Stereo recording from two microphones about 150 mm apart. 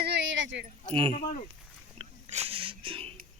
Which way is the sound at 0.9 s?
40° right (ahead or behind).